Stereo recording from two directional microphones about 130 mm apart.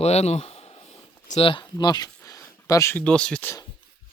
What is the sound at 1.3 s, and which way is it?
Speech, 45° left (ahead or behind).